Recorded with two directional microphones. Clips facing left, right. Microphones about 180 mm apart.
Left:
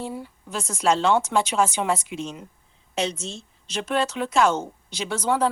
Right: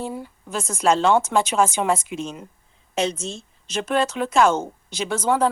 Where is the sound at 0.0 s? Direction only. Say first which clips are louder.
Right 2 dB; 50° right (ahead or behind).